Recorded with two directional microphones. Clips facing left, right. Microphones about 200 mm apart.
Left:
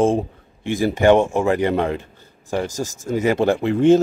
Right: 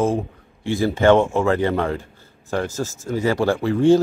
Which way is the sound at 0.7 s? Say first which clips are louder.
Left 1 dB; 15° left (ahead or behind).